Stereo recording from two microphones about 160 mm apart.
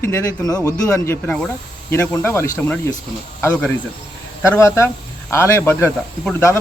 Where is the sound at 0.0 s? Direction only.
15° left (ahead or behind).